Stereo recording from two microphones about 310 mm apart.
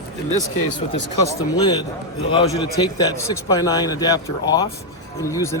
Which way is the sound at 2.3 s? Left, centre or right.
Centre.